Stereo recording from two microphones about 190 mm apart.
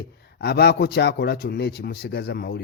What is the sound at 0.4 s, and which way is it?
Speech, 55° left (ahead or behind).